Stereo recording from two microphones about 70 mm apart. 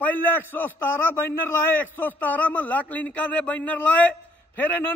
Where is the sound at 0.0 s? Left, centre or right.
Left.